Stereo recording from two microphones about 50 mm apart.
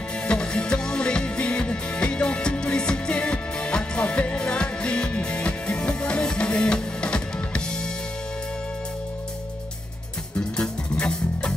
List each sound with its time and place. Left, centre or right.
0.3 s music: centre
10.5 s music: centre